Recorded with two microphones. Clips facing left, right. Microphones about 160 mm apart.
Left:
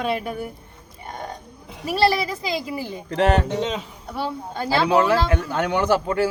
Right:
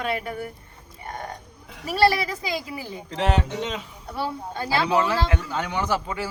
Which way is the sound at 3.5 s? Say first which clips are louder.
Left 5 dB; 30° left (ahead or behind).